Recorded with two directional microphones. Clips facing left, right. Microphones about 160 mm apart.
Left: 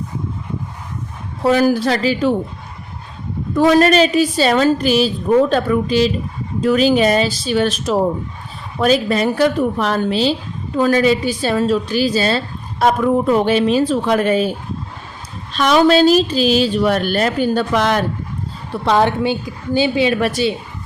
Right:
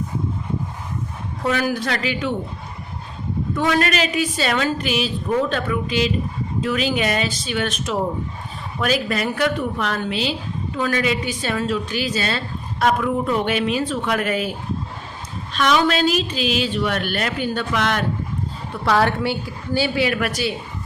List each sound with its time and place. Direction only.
1.5 s a woman's voice: 35° left (ahead or behind)
3.5 s a woman's voice: 35° left (ahead or behind)
15.5 s a woman's voice: 35° left (ahead or behind)
18.7 s a woman's voice: 20° left (ahead or behind)